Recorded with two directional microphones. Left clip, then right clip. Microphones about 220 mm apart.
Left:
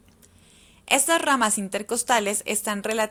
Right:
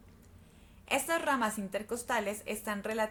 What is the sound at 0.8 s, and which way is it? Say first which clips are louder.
A woman's voice: left 10 dB; 40° left (ahead or behind).